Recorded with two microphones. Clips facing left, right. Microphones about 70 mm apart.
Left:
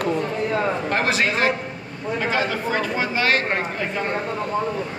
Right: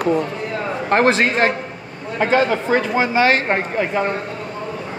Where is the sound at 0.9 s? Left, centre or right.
Right.